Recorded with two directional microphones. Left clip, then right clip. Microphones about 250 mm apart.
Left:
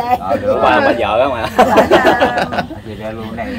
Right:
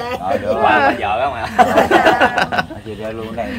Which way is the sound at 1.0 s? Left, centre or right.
Left.